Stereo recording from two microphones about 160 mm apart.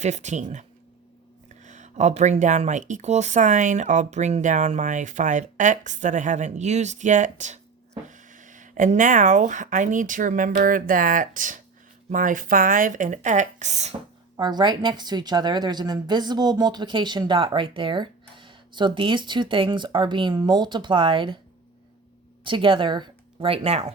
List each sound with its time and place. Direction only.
0.0 s speech: 45° right (ahead or behind)
1.6 s speech: 50° right (ahead or behind)
14.3 s a woman's voice: 25° right (ahead or behind)
22.4 s speech: 30° right (ahead or behind)